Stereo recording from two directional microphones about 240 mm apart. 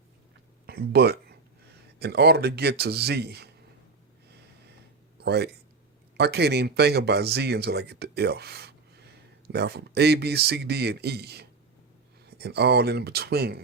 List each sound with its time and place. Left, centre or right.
0.7 s a sound: right
2.0 s speech: right
5.1 s speech: right